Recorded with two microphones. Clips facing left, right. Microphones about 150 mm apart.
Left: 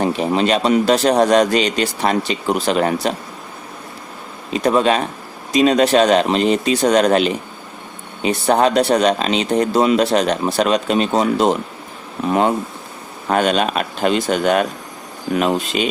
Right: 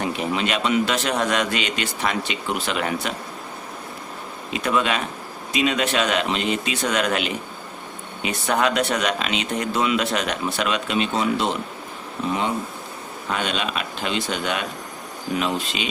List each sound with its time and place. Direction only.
0.0 s speech: 35° left (ahead or behind)
4.5 s a man's voice: 35° left (ahead or behind)